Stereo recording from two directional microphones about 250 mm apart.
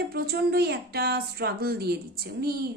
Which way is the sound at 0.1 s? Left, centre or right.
Right.